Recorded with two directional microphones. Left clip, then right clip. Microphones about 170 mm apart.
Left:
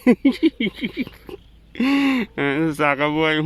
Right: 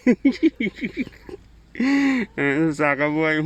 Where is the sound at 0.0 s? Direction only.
Centre (ahead or behind).